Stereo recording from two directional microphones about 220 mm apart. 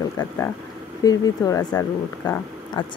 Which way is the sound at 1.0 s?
15° left (ahead or behind).